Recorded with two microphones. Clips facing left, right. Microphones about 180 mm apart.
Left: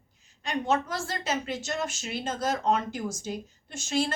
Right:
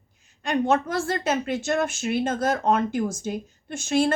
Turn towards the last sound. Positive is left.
turn(degrees=-55)  # may be behind; listen again after turning